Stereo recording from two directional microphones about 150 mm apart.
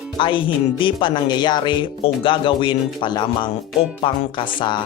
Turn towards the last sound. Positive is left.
turn(degrees=30)  # may be behind; listen again after turning